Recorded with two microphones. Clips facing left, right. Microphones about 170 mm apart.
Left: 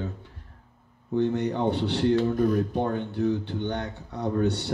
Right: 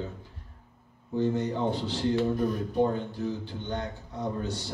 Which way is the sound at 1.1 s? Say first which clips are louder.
Left 3 dB; 65° left (ahead or behind).